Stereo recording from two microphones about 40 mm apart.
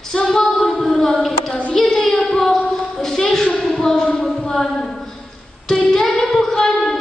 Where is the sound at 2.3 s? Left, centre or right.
Centre.